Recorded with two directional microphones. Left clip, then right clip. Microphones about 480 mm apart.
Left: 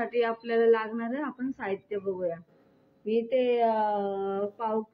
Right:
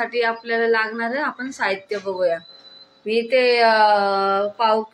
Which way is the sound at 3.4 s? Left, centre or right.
Left.